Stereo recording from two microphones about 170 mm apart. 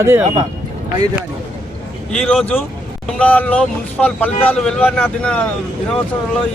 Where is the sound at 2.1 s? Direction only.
5° left (ahead or behind).